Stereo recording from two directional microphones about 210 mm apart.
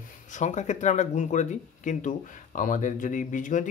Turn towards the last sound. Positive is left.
turn(degrees=35)  # may be behind; listen again after turning